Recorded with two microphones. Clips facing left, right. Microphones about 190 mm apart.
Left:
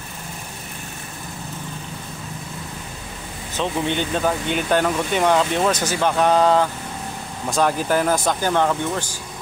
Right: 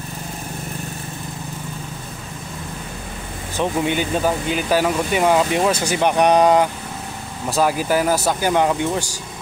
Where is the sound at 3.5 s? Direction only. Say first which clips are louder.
Right 2 dB; 10° right (ahead or behind).